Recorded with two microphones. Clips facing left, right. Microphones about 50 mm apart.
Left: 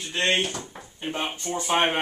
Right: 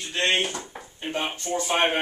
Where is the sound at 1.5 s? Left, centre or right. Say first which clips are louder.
Left 1 dB; centre.